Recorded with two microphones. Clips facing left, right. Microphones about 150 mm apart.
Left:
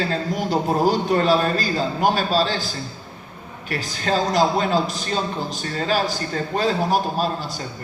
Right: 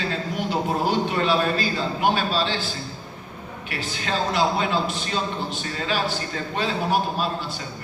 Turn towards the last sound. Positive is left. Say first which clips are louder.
# left 3 dB
turn(degrees=40)  # may be behind; listen again after turning